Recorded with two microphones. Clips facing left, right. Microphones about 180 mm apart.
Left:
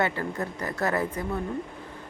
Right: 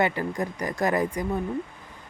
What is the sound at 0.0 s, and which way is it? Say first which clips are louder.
Speech: right 2 dB; 15° right (ahead or behind).